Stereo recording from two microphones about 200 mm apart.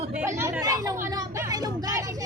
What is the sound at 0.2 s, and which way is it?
Speech, 15° right (ahead or behind).